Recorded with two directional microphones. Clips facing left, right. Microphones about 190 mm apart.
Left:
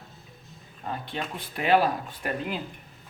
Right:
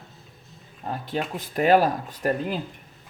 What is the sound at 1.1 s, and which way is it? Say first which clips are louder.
A man's voice: right 5 dB; 45° right (ahead or behind).